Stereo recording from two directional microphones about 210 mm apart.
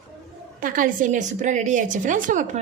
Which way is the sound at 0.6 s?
40° right (ahead or behind).